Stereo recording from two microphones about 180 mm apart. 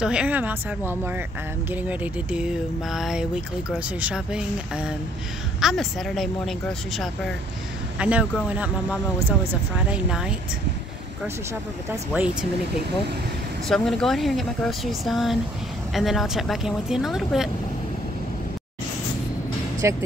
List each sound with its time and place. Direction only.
0.0 s speech: 5° right (ahead or behind)
8.0 s speech: 5° right (ahead or behind)
9.8 s speech: 5° right (ahead or behind)
12.1 s speech: 5° right (ahead or behind)
13.7 s speech: 5° left (ahead or behind)
19.8 s speech: 15° right (ahead or behind)